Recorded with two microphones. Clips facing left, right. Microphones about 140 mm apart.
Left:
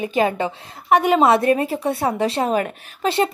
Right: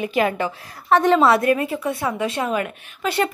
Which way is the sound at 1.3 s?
30° left (ahead or behind).